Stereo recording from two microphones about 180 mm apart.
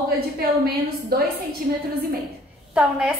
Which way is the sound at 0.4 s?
60° right (ahead or behind).